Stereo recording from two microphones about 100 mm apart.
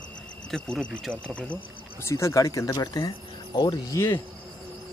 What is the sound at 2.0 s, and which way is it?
Speech, 30° left (ahead or behind).